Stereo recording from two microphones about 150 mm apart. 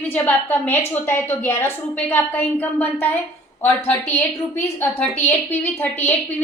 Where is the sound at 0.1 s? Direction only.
10° left (ahead or behind).